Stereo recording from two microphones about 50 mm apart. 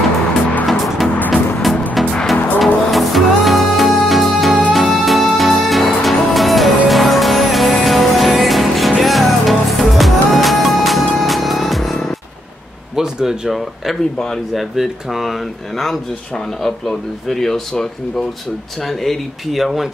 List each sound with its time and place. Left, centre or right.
0.7 s music: centre
2.3 s music: left
2.6 s music: centre
12.9 s a sound: centre
14.5 s speech: centre